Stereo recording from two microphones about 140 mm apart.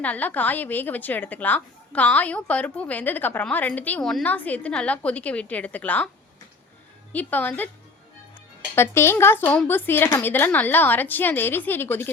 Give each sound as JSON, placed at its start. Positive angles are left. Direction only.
{"t": 0.0, "sound": "a woman's voice", "side_deg": 10}
{"t": 7.1, "sound": "a woman's voice", "side_deg": 10}
{"t": 8.7, "sound": "a woman's voice", "side_deg": 15}